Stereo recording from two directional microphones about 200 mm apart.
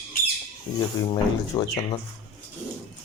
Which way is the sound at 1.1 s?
25° left (ahead or behind).